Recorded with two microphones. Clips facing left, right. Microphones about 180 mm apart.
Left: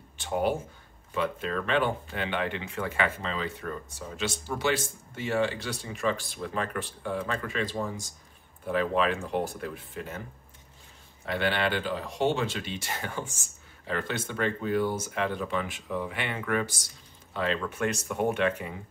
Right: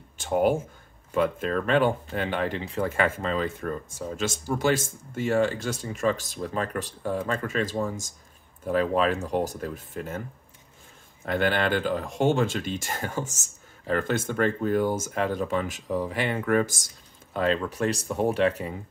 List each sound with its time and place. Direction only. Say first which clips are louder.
0.2 s speech: right 5 dB; 45° right (ahead or behind)
11.2 s speech: right 3 dB; 45° right (ahead or behind)